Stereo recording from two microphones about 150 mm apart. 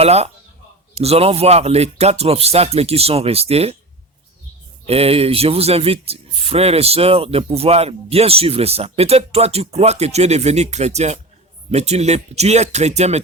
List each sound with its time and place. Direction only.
0.0 s speech: 45° right (ahead or behind)
4.9 s speech: 40° right (ahead or behind)